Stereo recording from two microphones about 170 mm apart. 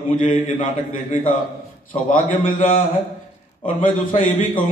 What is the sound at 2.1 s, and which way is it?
A man's voice, 50° left (ahead or behind).